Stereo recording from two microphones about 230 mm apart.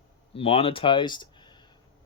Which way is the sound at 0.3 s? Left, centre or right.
Left.